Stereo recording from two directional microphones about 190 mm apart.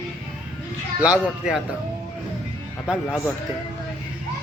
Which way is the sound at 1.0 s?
5° right (ahead or behind).